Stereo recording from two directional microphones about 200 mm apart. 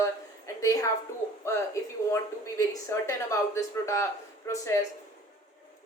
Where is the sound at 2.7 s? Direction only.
15° left (ahead or behind).